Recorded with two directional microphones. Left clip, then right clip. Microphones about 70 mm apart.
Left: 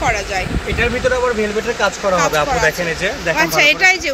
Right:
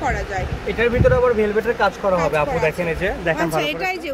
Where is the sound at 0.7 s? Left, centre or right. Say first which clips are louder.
Even; centre.